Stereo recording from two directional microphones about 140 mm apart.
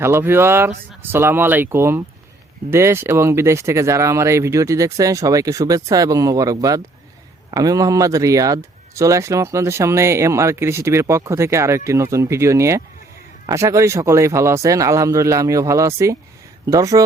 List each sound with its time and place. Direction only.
0.0 s speech: 15° right (ahead or behind)